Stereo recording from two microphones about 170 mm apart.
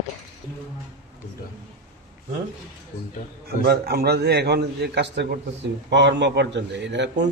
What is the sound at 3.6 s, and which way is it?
A man's voice, 65° right (ahead or behind).